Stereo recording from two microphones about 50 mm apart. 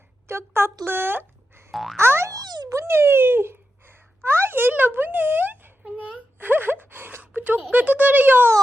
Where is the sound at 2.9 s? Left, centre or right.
Right.